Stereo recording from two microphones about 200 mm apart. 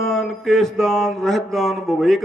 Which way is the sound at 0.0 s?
Centre (ahead or behind).